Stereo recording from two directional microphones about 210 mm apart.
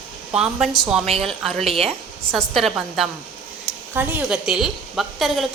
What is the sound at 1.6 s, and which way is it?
Speech, 30° right (ahead or behind).